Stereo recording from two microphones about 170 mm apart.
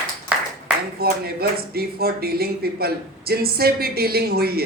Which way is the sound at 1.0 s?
65° right (ahead or behind).